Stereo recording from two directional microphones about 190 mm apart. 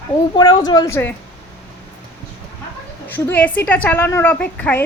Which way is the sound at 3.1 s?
10° left (ahead or behind).